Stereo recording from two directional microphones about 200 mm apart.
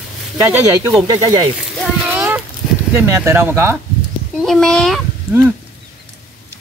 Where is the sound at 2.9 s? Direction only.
10° right (ahead or behind).